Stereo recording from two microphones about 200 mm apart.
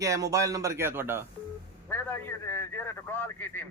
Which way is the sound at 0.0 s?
15° right (ahead or behind).